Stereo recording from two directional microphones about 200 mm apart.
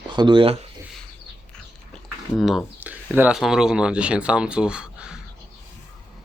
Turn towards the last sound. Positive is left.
turn(degrees=-5)  # may be behind; listen again after turning